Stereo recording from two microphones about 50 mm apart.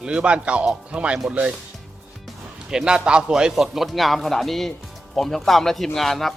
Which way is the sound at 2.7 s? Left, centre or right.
Centre.